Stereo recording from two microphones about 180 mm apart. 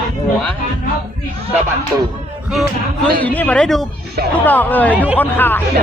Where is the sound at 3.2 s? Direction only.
10° left (ahead or behind).